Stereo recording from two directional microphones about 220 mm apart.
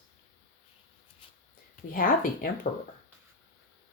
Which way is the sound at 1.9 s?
40° left (ahead or behind).